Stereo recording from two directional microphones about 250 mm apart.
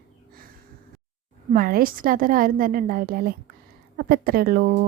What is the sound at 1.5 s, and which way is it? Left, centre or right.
A woman's voice, right.